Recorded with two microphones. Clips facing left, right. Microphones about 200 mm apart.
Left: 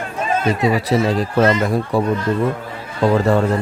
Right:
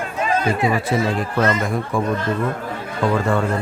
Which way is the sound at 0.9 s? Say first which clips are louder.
Left 3 dB; 30° left (ahead or behind).